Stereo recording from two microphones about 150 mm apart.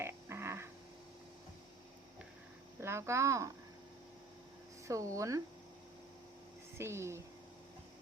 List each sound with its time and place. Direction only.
0.0 s a sound: 15° right (ahead or behind)
2.8 s speech: 20° right (ahead or behind)
4.9 s speech: 20° right (ahead or behind)
6.7 s speech: 15° right (ahead or behind)